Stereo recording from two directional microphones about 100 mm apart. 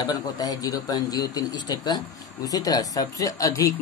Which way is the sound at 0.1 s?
40° left (ahead or behind).